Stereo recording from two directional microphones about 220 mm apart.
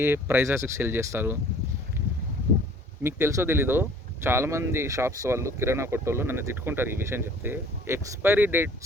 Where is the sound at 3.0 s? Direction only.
10° right (ahead or behind).